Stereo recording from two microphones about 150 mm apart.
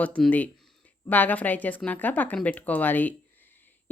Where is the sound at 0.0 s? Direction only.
10° left (ahead or behind).